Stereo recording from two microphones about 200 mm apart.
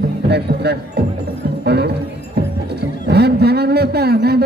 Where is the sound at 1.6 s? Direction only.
55° right (ahead or behind).